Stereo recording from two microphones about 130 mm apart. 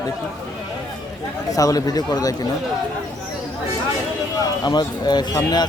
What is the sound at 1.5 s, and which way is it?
Speech, 25° left (ahead or behind).